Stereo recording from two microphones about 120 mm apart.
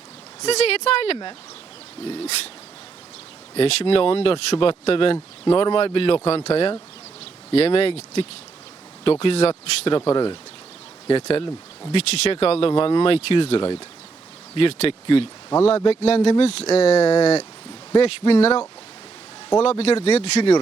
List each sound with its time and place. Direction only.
0.4 s speech: 60° left (ahead or behind)
2.0 s a sound: 55° left (ahead or behind)
3.5 s speech: 55° left (ahead or behind)
10.1 s speech: 40° left (ahead or behind)
11.1 s speech: 55° left (ahead or behind)
19.6 s speech: 60° left (ahead or behind)